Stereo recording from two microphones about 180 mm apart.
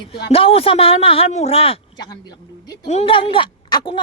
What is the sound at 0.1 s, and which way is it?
Speech, 30° left (ahead or behind).